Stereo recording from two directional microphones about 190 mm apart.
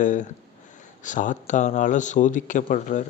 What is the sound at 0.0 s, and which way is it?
Speech, 40° left (ahead or behind).